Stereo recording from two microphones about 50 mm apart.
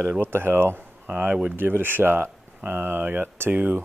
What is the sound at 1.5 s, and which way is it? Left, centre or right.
Speech, right.